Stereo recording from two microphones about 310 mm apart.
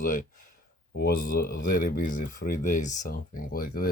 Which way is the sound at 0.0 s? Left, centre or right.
Left.